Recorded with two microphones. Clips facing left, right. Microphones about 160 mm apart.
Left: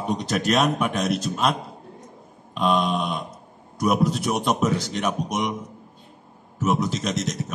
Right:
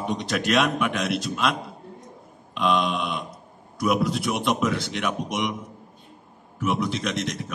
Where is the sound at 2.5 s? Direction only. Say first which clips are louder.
Left 1 dB; 40° left (ahead or behind).